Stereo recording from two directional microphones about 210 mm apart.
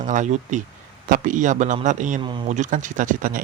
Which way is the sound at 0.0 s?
35° right (ahead or behind).